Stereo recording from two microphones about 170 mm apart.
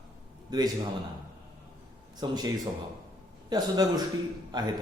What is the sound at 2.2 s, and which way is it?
Speech, 25° right (ahead or behind).